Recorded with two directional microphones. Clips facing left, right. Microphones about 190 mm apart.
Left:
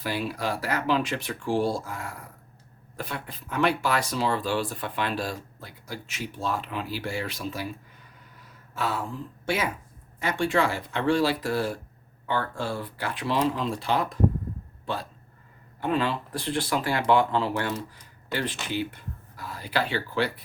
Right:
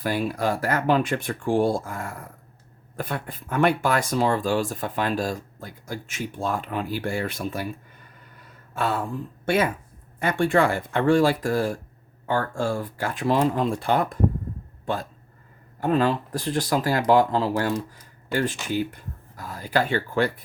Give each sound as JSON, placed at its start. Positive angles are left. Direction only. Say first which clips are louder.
{"t": 0.0, "sound": "speech", "louder": "right 5 dB", "side_deg": -50}
{"t": 8.7, "sound": "a sound", "louder": "right 4 dB", "side_deg": -55}
{"t": 10.2, "sound": "speech", "louder": "right 4 dB", "side_deg": -55}
{"t": 15.8, "sound": "speech", "louder": "right 5 dB", "side_deg": -45}